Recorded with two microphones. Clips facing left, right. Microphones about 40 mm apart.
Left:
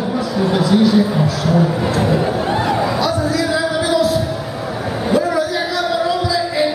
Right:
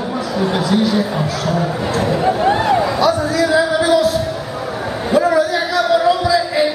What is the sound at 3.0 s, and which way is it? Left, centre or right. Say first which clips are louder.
Music: right 3 dB; centre.